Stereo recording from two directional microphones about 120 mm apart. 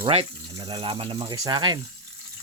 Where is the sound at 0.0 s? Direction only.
55° right (ahead or behind); by 1.8 s 35° right (ahead or behind).